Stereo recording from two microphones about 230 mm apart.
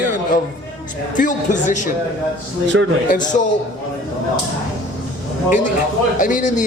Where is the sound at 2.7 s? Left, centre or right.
Right.